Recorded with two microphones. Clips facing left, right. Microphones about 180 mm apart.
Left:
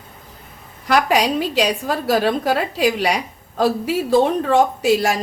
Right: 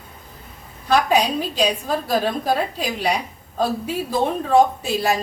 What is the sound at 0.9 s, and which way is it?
A woman's voice, 80° left.